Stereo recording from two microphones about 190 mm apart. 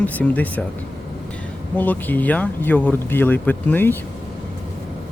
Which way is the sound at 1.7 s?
10° left (ahead or behind).